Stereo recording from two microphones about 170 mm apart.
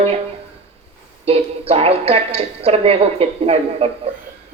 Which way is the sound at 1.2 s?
35° right (ahead or behind).